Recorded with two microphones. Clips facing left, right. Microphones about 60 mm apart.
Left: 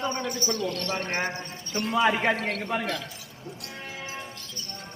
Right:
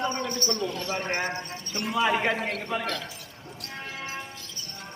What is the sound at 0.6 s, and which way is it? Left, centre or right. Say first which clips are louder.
Speech: even; centre.